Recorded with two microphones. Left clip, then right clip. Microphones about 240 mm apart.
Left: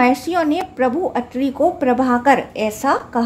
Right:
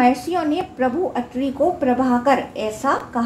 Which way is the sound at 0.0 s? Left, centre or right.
Left.